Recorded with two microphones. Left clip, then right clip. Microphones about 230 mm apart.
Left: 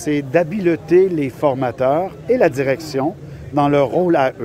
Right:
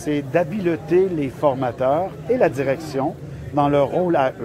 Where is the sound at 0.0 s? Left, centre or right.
Left.